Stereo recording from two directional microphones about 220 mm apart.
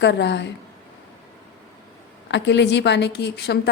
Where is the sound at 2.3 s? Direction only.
50° left (ahead or behind).